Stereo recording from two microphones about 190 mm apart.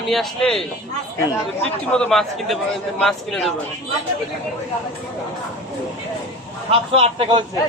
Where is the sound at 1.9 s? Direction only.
5° left (ahead or behind).